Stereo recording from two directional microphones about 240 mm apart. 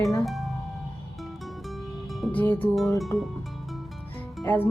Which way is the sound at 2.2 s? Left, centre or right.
Centre.